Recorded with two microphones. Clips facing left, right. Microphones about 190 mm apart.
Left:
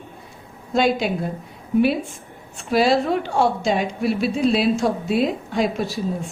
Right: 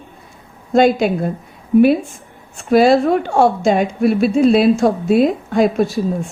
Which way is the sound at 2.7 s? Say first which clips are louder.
Right 6 dB; 50° right (ahead or behind).